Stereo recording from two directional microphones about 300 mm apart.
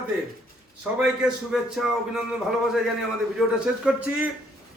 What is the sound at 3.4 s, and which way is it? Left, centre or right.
Speech, centre.